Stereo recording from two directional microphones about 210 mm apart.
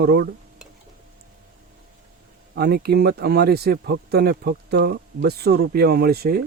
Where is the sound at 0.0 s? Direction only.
50° right (ahead or behind).